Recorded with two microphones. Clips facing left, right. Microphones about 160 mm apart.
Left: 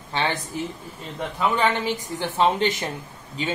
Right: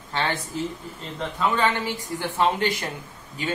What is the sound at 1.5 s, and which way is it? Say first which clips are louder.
A woman's voice: left 2 dB; 15° left (ahead or behind).